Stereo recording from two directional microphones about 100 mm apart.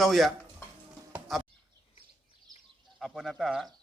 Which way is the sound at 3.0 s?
Centre (ahead or behind).